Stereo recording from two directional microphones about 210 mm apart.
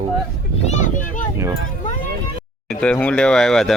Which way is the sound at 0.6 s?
35° left (ahead or behind).